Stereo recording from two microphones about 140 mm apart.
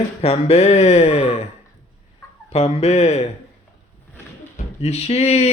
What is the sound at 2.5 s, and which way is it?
Speech, 50° left (ahead or behind).